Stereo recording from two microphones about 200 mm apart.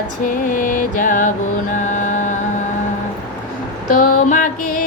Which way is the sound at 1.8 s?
40° left (ahead or behind).